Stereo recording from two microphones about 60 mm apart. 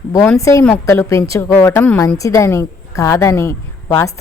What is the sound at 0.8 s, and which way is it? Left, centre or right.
A woman's voice, left.